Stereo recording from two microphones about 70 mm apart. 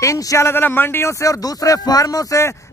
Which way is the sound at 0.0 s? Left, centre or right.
Left.